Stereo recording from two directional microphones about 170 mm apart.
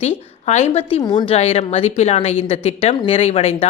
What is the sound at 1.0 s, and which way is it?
Speech, 25° left (ahead or behind).